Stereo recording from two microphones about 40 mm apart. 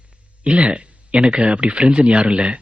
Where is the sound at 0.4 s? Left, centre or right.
Right.